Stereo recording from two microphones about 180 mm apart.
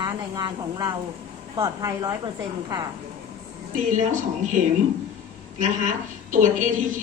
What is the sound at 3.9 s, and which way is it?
Speech, 45° right (ahead or behind).